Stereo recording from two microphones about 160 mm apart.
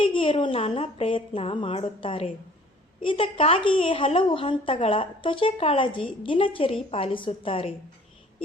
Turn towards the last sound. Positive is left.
turn(degrees=35)  # may be behind; listen again after turning